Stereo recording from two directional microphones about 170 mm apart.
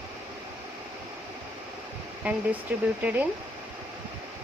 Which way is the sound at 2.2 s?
10° right (ahead or behind).